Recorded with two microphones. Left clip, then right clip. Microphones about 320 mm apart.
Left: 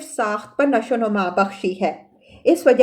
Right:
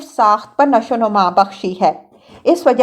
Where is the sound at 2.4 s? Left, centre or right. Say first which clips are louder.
Right 2 dB; centre.